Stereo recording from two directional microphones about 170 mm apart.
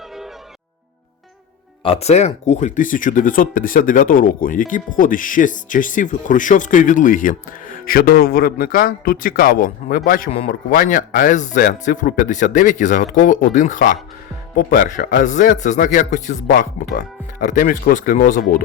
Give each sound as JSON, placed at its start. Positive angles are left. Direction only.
{"t": 1.8, "sound": "speech", "side_deg": 35}